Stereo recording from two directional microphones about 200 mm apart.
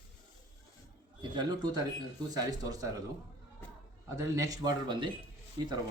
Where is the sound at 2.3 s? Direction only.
20° right (ahead or behind).